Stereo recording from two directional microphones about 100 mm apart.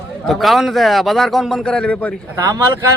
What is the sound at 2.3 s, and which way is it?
Speech, 35° right (ahead or behind).